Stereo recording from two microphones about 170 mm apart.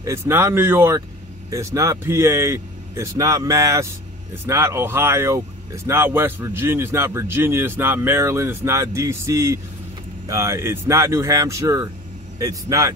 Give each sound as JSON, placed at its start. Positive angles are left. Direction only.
{"t": 0.0, "sound": "speech", "side_deg": -15}